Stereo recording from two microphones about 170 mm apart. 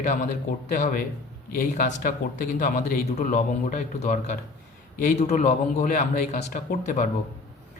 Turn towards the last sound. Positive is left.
turn(degrees=50)  # may be behind; listen again after turning